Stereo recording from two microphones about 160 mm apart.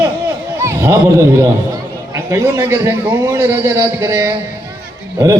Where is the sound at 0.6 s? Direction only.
15° right (ahead or behind).